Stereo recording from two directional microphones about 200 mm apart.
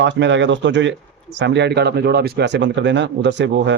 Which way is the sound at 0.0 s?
65° right (ahead or behind).